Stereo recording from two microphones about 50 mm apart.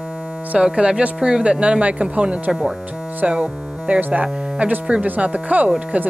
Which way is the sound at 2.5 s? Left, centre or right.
Centre.